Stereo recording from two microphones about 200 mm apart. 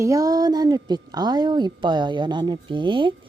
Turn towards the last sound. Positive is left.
turn(degrees=-25)  # may be behind; listen again after turning